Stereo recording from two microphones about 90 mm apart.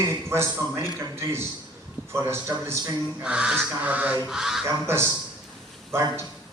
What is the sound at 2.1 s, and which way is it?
Speech, 30° right (ahead or behind).